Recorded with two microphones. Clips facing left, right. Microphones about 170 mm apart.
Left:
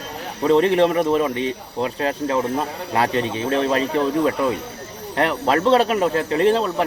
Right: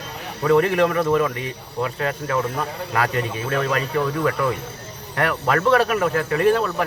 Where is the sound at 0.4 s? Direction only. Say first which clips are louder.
Left 2 dB; 25° left (ahead or behind).